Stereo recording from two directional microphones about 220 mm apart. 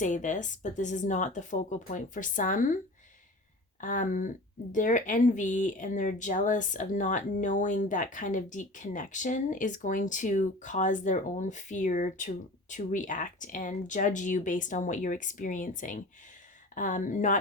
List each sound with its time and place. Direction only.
0.0 s speech: 35° left (ahead or behind)
3.8 s speech: 35° left (ahead or behind)